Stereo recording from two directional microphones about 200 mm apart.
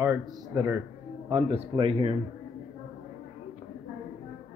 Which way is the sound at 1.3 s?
25° right (ahead or behind).